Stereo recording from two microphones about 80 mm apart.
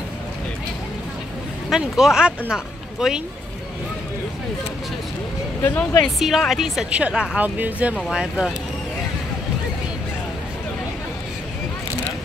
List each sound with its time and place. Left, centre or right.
1.7 s speech: centre
5.6 s speech: left
6.0 s a woman's voice: centre
6.9 s speech: centre
8.1 s speech: centre